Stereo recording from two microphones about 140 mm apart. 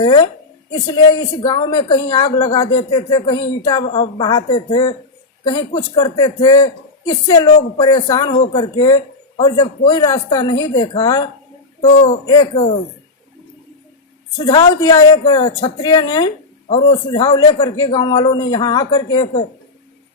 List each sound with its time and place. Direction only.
0.0 s a man's voice: 30° left (ahead or behind)
5.5 s a man's voice: 30° left (ahead or behind)
14.8 s a man's voice: 30° left (ahead or behind)